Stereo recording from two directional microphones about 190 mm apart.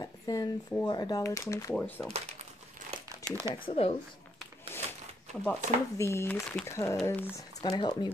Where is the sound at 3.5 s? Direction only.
30° left (ahead or behind).